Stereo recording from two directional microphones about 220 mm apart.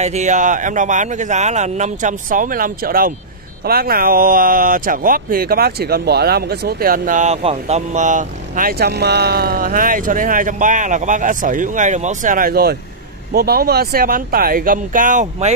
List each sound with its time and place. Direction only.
0.0 s speech: 30° right (ahead or behind)